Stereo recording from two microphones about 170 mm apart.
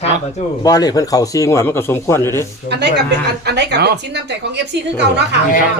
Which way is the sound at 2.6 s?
85° right.